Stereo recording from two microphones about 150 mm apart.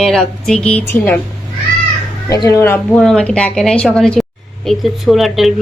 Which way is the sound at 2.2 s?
20° left (ahead or behind).